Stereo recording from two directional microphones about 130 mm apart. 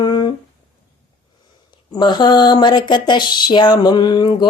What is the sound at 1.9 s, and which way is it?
Speech, 35° left (ahead or behind).